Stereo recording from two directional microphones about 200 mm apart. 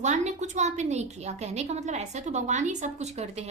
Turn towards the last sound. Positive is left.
turn(degrees=-30)  # may be behind; listen again after turning